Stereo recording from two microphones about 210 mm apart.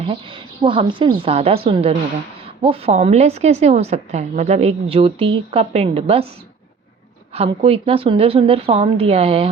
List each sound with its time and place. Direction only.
0.1 s a woman's voice: 25° right (ahead or behind)
7.3 s a woman's voice: 30° right (ahead or behind)